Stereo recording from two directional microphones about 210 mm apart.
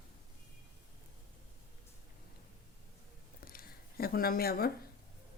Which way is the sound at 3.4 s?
45° left (ahead or behind).